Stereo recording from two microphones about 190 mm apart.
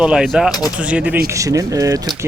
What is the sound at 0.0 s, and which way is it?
Speech, 5° right (ahead or behind).